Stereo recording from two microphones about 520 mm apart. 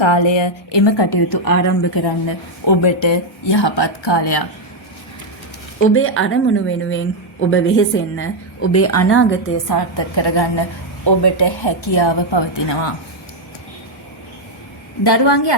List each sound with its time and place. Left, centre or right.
0.0 s a woman's voice: left
5.8 s speech: left
9.6 s a woman's voice: left
15.0 s a woman's voice: left